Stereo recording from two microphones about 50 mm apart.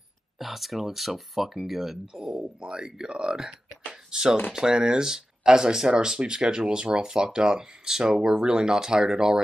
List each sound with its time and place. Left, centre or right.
0.4 s speech: centre
2.3 s speech: centre